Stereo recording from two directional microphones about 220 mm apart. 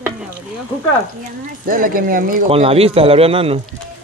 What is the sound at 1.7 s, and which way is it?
Speech, 40° right (ahead or behind).